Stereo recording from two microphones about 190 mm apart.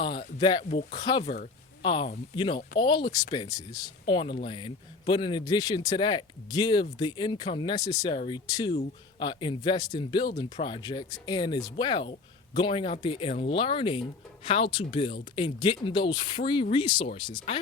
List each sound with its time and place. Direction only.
0.3 s a man's voice: 30° left (ahead or behind)
1.2 s a man's voice: 35° left (ahead or behind)